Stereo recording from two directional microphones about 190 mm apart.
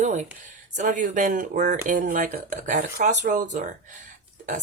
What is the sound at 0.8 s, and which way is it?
Speech, 40° right (ahead or behind).